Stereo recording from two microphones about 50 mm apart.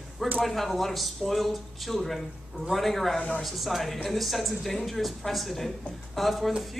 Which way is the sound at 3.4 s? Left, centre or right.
Centre.